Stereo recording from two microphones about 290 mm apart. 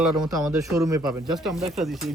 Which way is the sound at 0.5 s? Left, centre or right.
Centre.